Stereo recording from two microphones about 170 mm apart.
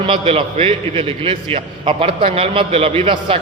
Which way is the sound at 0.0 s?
35° right (ahead or behind).